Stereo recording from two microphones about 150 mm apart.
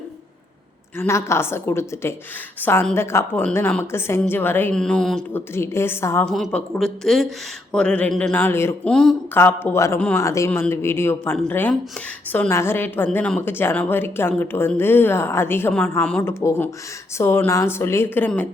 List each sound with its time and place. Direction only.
0.9 s speech: 20° left (ahead or behind)
5.5 s speech: 15° left (ahead or behind)
6.2 s speech: centre (ahead or behind)
8.9 s speech: 5° left (ahead or behind)
16.4 s speech: 20° left (ahead or behind)